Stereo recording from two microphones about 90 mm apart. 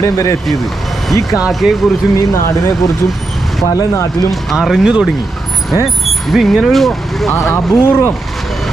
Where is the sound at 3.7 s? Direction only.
40° left (ahead or behind).